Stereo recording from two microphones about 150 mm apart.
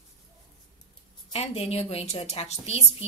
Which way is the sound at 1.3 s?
40° left (ahead or behind).